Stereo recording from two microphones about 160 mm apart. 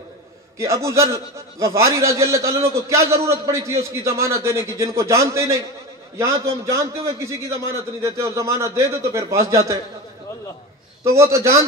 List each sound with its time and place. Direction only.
0.6 s a man's voice: 20° right (ahead or behind)
11.1 s a man's voice: 20° right (ahead or behind)